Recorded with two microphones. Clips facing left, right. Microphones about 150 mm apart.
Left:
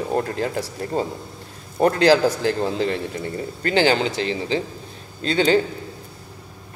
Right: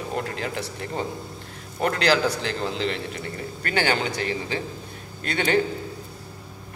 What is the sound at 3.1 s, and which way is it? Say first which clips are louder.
A man's voice: left 5 dB; 25° left (ahead or behind).